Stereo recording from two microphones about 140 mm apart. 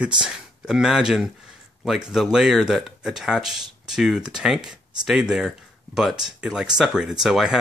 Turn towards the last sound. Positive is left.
turn(degrees=-5)  # may be behind; listen again after turning